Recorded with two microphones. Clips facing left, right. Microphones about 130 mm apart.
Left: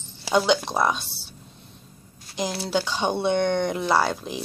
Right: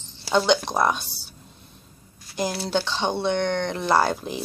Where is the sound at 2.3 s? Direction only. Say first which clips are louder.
Right 1 dB; 5° right (ahead or behind).